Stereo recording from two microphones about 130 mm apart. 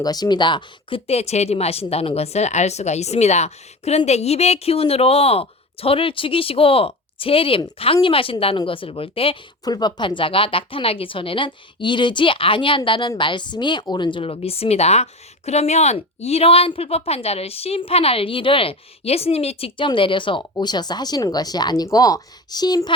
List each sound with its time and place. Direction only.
0.0 s speech: 30° left (ahead or behind)
9.6 s speech: 30° left (ahead or behind)